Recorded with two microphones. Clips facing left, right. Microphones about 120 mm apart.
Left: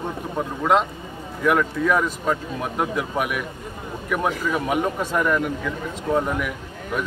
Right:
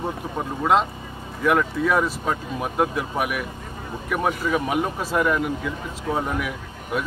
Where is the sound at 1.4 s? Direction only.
Centre (ahead or behind).